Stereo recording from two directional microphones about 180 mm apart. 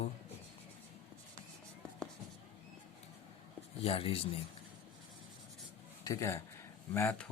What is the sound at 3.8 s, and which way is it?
Speech, 30° left (ahead or behind).